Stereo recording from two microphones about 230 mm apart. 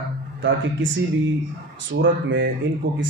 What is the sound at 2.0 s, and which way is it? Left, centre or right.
Speech, right.